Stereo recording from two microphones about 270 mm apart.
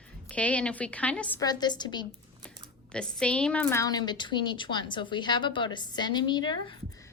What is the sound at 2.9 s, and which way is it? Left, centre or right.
A woman's voice, centre.